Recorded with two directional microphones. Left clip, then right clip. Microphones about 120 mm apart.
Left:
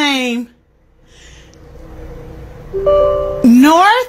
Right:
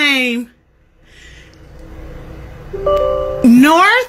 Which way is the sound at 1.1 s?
30° left (ahead or behind).